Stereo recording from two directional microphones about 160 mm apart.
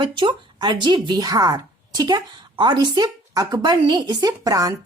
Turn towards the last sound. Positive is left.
turn(degrees=-20)  # may be behind; listen again after turning